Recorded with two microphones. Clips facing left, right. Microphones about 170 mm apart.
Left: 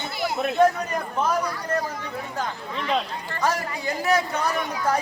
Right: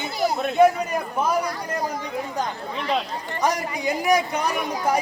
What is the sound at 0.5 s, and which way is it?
Speech, 10° right (ahead or behind).